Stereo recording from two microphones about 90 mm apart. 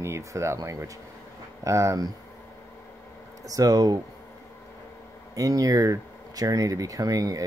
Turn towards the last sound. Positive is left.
turn(degrees=-40)  # may be behind; listen again after turning